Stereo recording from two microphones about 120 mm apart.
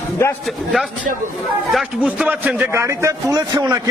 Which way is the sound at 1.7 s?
5° right (ahead or behind).